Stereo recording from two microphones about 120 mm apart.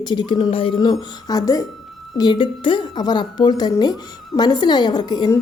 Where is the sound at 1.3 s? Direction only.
30° left (ahead or behind).